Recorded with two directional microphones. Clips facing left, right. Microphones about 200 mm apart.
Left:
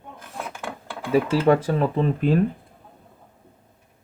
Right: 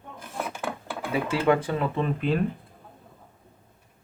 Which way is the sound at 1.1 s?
35° left (ahead or behind).